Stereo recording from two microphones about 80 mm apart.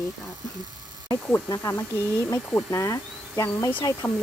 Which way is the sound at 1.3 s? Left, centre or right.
Left.